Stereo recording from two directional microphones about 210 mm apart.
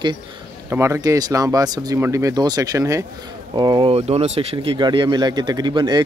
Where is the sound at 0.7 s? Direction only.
10° right (ahead or behind).